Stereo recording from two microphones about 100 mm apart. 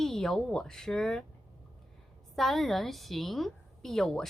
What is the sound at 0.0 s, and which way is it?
A woman's voice, 5° left (ahead or behind).